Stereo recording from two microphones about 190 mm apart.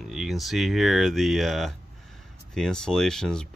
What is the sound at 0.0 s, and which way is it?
Speech, centre (ahead or behind).